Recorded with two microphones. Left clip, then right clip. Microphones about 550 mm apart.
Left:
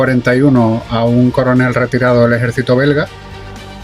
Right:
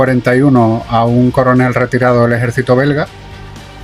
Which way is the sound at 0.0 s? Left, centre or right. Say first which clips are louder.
Right 1 dB; right.